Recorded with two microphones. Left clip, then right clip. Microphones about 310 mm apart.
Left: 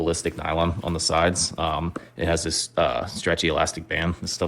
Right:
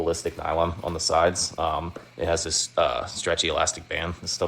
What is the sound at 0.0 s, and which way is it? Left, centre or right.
Speech, left.